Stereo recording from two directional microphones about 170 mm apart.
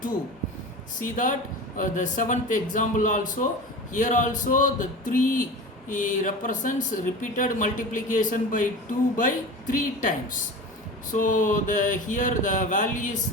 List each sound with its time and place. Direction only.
0.9 s speech: 50° left (ahead or behind)